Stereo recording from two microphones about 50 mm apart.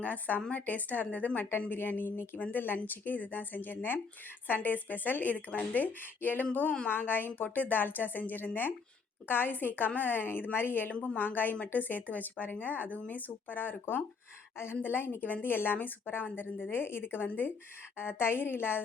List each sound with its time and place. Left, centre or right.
0.0 s speech: left
5.5 s speech: left
5.8 s a woman's voice: left